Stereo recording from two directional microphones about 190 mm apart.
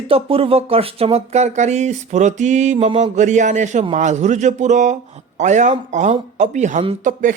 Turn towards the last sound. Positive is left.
turn(degrees=-40)  # may be behind; listen again after turning